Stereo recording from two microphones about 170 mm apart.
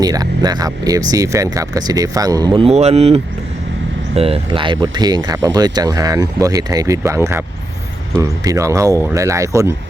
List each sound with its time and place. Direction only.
0.0 s speech: 20° right (ahead or behind)